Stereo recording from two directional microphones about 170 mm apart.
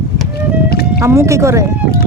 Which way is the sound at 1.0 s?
20° right (ahead or behind).